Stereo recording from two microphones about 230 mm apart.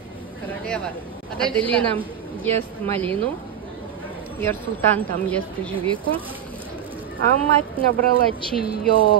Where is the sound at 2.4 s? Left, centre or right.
Centre.